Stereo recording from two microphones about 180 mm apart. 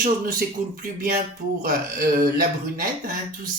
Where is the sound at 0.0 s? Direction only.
50° right (ahead or behind).